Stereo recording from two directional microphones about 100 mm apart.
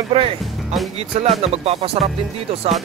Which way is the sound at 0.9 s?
90° right.